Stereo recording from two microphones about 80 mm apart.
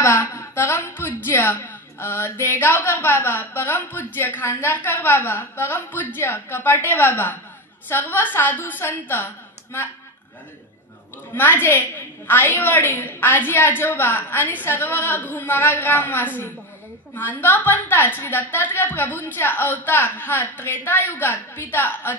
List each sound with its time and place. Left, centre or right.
0.0 s speech: left
11.3 s speech: left